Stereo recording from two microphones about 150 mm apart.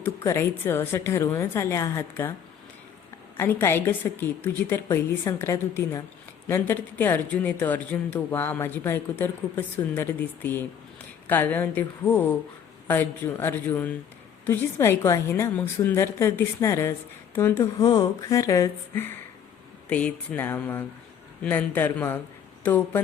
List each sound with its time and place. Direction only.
0.3 s speech: 15° left (ahead or behind)
3.3 s a woman's voice: 15° left (ahead or behind)
17.6 s a woman's voice: 30° left (ahead or behind)
19.9 s speech: 10° left (ahead or behind)